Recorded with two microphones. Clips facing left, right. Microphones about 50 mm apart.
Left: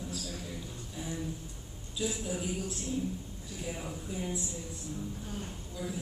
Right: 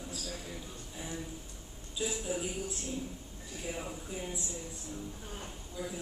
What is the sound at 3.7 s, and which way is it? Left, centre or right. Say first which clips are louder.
Speech: left 1 dB; centre.